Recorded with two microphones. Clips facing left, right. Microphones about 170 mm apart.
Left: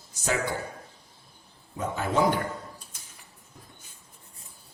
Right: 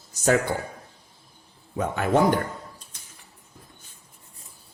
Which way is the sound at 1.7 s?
65° right (ahead or behind).